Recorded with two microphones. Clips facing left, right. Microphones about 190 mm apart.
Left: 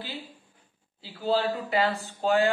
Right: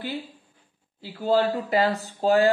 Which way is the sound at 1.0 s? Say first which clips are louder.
Right 4 dB; 45° right (ahead or behind).